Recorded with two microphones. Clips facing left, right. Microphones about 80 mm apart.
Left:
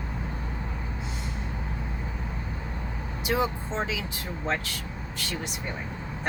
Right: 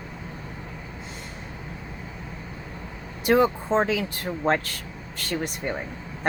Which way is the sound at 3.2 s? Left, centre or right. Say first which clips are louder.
Right 7 dB; right.